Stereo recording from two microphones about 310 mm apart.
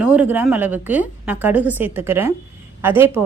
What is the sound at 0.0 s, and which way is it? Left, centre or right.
A woman's voice, centre.